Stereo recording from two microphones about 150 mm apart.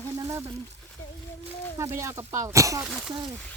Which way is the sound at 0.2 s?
20° right (ahead or behind).